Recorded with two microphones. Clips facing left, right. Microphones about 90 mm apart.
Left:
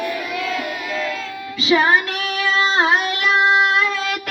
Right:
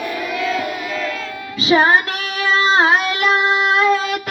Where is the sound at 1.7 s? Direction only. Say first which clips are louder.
Right 2 dB; 35° right (ahead or behind).